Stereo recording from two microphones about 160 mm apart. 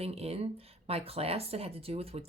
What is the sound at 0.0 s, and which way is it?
Speech, 40° right (ahead or behind).